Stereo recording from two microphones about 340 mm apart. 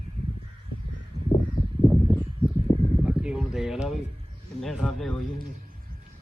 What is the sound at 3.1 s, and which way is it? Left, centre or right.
Speech, centre.